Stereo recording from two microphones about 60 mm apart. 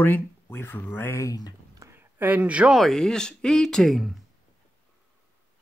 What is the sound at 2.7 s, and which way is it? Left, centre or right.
Speech, centre.